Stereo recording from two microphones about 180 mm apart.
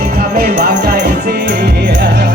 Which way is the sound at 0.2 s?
55° right (ahead or behind).